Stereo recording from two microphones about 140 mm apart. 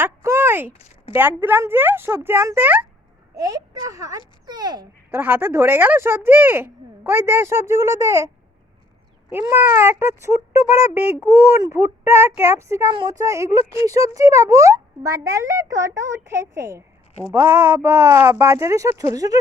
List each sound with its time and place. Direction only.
0.0 s a sound: 20° right (ahead or behind)
0.7 s speech: 45° left (ahead or behind)
1.1 s speech: 15° right (ahead or behind)
3.3 s speech: 25° right (ahead or behind)
5.1 s speech: 15° right (ahead or behind)
9.3 s speech: 15° right (ahead or behind)